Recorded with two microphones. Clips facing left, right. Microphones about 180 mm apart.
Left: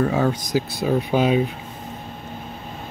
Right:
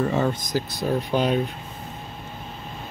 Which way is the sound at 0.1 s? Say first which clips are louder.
Left 3 dB; 5° left (ahead or behind).